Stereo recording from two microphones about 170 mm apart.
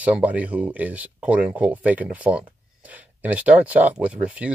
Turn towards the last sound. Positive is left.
turn(degrees=-10)  # may be behind; listen again after turning